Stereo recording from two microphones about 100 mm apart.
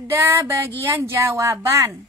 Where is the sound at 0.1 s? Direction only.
30° right (ahead or behind).